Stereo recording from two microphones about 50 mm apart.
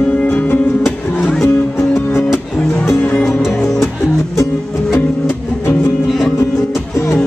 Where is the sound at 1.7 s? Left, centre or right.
Left.